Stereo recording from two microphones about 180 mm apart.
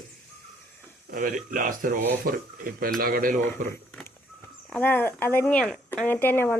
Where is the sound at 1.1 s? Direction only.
50° right (ahead or behind).